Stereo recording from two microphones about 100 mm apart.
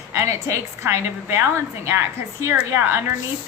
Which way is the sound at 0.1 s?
30° right (ahead or behind).